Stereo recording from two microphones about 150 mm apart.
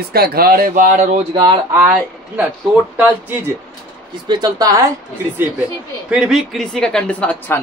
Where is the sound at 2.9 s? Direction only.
10° right (ahead or behind).